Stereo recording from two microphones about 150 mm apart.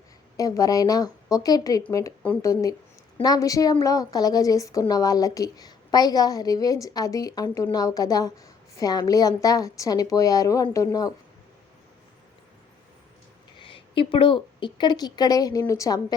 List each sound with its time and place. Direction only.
0.3 s a woman's voice: 20° left (ahead or behind)
13.6 s a woman's voice: 35° left (ahead or behind)